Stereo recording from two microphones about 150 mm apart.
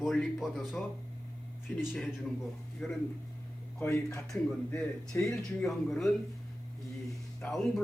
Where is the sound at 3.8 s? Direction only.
15° left (ahead or behind).